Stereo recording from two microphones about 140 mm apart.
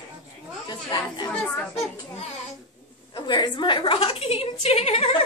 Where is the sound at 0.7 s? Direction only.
30° left (ahead or behind).